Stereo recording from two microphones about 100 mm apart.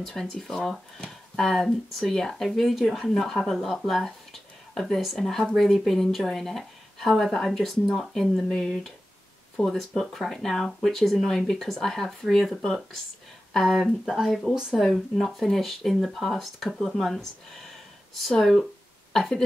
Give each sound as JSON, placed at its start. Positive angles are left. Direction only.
{"t": 0.0, "sound": "speech", "side_deg": 5}